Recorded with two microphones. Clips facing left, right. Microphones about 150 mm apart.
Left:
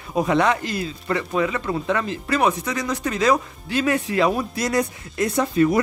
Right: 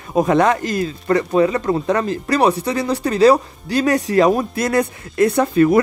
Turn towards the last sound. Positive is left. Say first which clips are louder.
# right 5 dB
turn(degrees=-60)  # may be behind; listen again after turning